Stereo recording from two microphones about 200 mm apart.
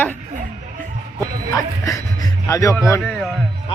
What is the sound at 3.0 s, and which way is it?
Speech, 5° left (ahead or behind).